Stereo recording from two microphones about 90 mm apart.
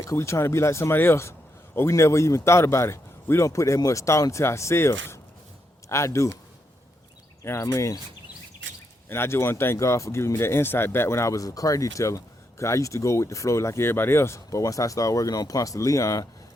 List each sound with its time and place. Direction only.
0.0 s speech: 35° left (ahead or behind)
7.4 s speech: 30° left (ahead or behind)
9.0 s speech: 25° left (ahead or behind)